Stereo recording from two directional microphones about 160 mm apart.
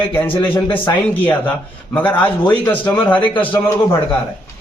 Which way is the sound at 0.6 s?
30° left (ahead or behind).